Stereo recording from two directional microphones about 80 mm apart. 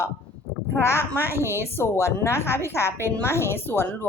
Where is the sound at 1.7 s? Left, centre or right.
Left.